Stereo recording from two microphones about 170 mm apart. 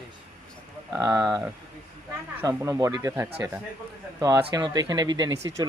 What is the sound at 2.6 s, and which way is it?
Speech, 20° right (ahead or behind).